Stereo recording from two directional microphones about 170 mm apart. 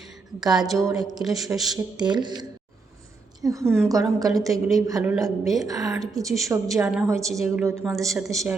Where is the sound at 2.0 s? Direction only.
25° right (ahead or behind).